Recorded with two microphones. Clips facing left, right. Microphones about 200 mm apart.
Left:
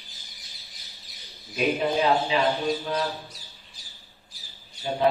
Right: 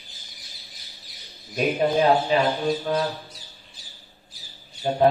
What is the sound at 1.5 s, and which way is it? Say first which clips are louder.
Speech: right 3 dB; 50° right (ahead or behind).